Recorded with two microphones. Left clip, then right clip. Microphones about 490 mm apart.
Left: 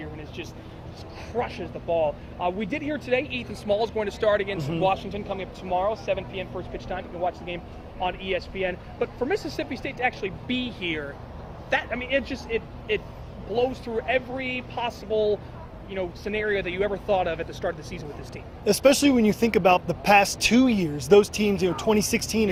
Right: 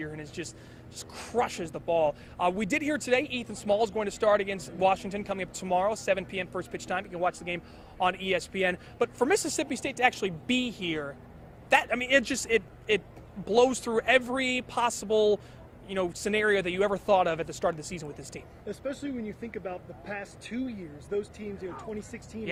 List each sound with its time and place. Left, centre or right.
1.4 s speech: right
18.6 s a man's voice: left
20.6 s speech: left
21.6 s speech: left